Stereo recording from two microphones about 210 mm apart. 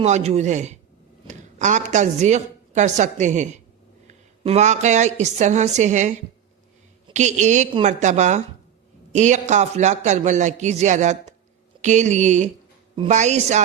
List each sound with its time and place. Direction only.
0.0 s a man's voice: 30° right (ahead or behind)